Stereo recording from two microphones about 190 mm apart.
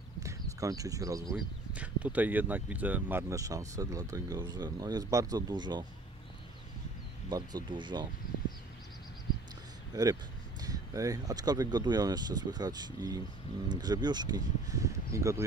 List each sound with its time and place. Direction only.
0.2 s speech: 15° right (ahead or behind)
1.3 s speech: 5° right (ahead or behind); by 5.9 s 20° right (ahead or behind)
7.2 s speech: 20° right (ahead or behind)
10.6 s speech: 20° right (ahead or behind)